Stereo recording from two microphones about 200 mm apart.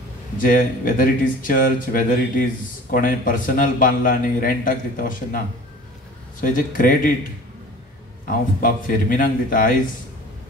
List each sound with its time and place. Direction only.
0.4 s a man's voice: 40° left (ahead or behind)
6.4 s a man's voice: 40° left (ahead or behind)
8.3 s a man's voice: 45° left (ahead or behind)